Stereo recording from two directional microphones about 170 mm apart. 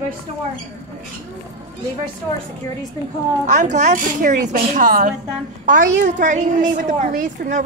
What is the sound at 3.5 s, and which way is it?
A woman's voice, 45° right (ahead or behind).